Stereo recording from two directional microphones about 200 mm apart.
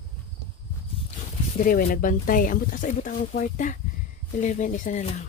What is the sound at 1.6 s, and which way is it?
Speech, 45° left (ahead or behind).